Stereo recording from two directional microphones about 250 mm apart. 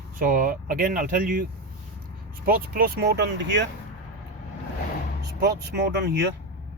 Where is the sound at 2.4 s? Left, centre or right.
Right.